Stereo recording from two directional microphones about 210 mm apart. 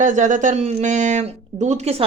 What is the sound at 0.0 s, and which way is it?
Speech, 35° right (ahead or behind).